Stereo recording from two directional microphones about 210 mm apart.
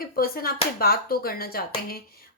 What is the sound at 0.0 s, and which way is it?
Speech, 45° left (ahead or behind).